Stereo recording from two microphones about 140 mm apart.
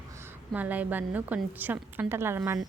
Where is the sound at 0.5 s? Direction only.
10° right (ahead or behind).